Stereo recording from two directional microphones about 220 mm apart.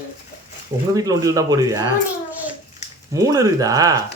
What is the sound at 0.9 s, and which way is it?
Speech, 15° right (ahead or behind).